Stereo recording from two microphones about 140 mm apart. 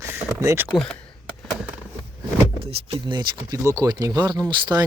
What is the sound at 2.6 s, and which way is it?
Speech, 35° right (ahead or behind).